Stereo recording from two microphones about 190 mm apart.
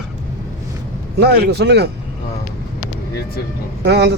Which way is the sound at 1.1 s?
60° right (ahead or behind).